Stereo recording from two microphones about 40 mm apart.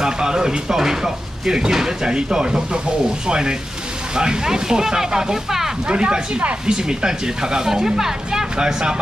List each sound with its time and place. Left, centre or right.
0.0 s speech: centre
5.9 s speech: right